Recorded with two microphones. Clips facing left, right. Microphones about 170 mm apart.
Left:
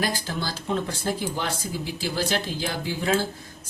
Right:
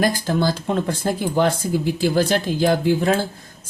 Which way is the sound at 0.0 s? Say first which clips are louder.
Right 9 dB; 50° right (ahead or behind).